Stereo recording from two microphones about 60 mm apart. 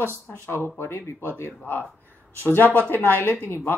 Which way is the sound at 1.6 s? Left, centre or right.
Left.